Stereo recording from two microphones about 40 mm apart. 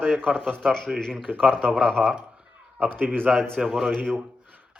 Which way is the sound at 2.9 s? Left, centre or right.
Right.